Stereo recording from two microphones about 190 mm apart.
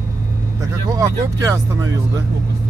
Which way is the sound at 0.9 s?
20° right (ahead or behind).